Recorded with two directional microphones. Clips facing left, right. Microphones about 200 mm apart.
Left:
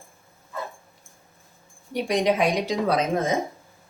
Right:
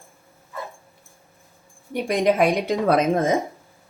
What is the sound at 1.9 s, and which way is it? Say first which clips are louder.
Speech: right 2 dB; 55° right (ahead or behind).